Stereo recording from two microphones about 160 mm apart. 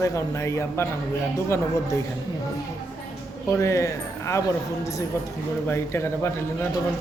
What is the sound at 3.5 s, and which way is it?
Speech, 20° left (ahead or behind).